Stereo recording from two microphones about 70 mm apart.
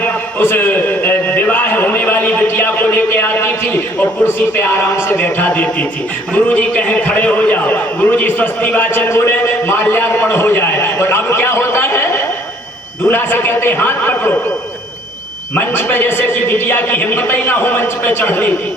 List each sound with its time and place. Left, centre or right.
0.0 s a sound: left
6.3 s a man's voice: left
15.5 s a man's voice: left